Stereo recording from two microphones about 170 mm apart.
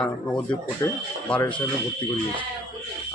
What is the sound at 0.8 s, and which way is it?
Speech, 20° left (ahead or behind).